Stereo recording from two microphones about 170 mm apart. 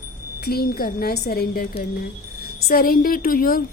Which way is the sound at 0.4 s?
65° left (ahead or behind).